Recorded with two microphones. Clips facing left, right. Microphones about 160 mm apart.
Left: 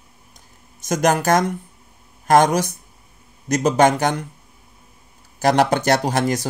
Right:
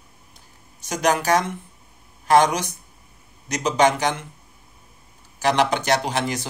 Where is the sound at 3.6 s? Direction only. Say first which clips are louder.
Left 3 dB; 50° left (ahead or behind).